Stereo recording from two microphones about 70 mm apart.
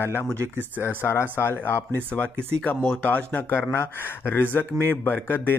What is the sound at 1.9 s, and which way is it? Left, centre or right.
Speech, centre.